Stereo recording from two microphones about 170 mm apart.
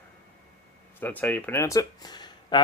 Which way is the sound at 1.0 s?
10° left (ahead or behind).